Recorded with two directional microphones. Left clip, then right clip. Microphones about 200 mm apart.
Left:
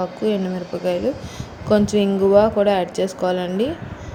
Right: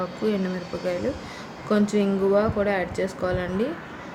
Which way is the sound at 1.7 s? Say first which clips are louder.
Left 6 dB; 20° left (ahead or behind).